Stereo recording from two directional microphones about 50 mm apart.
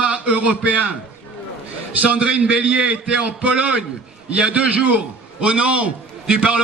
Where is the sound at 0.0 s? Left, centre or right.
Right.